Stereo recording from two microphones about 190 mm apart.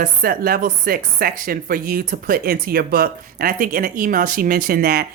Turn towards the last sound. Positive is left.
turn(degrees=-55)  # may be behind; listen again after turning